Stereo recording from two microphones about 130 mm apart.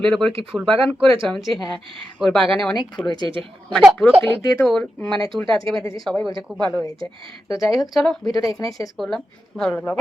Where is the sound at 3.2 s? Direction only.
40° right (ahead or behind).